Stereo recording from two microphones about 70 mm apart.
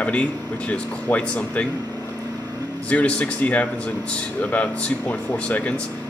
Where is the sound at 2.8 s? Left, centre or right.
Centre.